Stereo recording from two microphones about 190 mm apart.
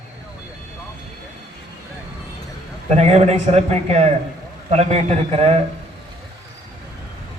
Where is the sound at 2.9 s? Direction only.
35° right (ahead or behind).